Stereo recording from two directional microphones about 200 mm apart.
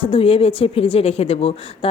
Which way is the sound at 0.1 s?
25° left (ahead or behind).